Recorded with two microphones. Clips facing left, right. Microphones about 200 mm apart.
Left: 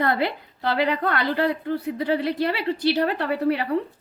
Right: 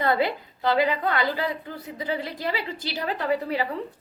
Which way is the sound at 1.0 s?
65° left (ahead or behind).